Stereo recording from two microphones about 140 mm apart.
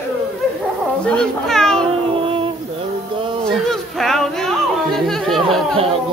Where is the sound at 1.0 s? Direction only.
5° left (ahead or behind).